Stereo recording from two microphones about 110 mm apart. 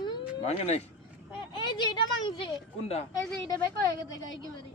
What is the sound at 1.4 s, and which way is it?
Speech, 45° left (ahead or behind).